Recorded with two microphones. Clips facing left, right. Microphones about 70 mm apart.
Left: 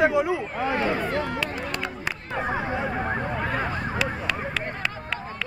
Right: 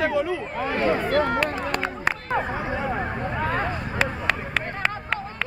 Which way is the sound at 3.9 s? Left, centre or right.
Right.